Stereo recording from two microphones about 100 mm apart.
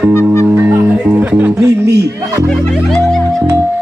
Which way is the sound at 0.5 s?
25° right (ahead or behind).